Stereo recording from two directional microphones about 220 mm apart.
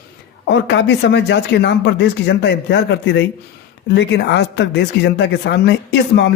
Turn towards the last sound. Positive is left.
turn(degrees=50)  # may be behind; listen again after turning